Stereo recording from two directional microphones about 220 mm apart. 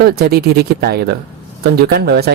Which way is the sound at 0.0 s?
45° right (ahead or behind).